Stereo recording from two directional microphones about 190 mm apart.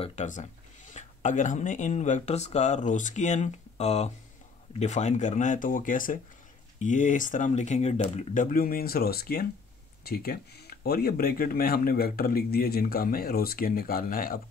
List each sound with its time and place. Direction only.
0.0 s speech: 40° left (ahead or behind)